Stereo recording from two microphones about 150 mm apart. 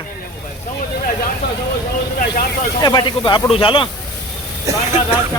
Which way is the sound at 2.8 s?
30° left (ahead or behind).